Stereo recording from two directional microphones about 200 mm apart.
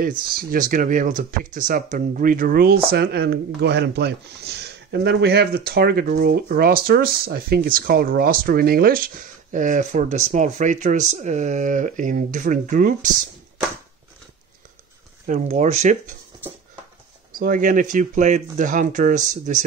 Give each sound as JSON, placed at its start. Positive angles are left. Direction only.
{"t": 0.4, "sound": "speech", "side_deg": -45}
{"t": 15.2, "sound": "speech", "side_deg": -40}
{"t": 17.4, "sound": "speech", "side_deg": -40}